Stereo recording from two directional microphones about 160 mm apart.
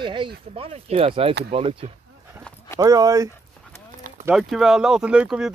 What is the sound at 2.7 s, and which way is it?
Speech, 20° right (ahead or behind).